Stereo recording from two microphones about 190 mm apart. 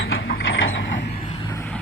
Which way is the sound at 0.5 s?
90° left.